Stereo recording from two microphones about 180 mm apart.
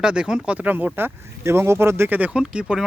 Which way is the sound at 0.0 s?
5° right (ahead or behind).